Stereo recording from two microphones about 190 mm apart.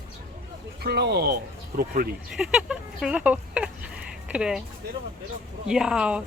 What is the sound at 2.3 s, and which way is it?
Speech, 5° right (ahead or behind).